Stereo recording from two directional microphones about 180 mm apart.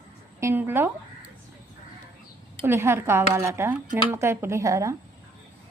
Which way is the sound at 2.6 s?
15° right (ahead or behind).